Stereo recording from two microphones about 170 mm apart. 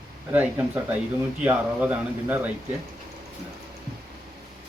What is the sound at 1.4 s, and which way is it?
A man's voice, 10° right (ahead or behind).